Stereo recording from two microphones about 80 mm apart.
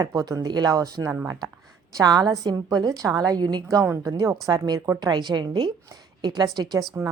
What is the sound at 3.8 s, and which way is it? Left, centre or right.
A woman's voice, right.